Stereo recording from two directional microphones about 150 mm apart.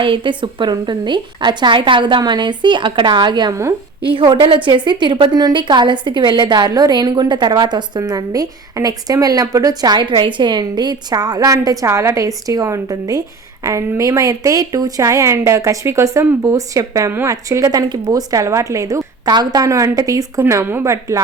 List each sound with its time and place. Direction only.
0.0 s a woman's voice: 35° right (ahead or behind)